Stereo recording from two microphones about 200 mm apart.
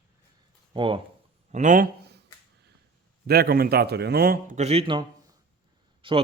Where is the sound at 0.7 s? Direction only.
25° right (ahead or behind).